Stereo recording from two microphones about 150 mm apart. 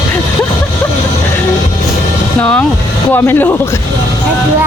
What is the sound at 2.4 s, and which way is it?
Speech, 5° left (ahead or behind).